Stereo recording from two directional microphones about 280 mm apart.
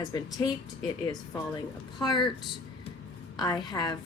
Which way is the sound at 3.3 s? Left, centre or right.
Centre.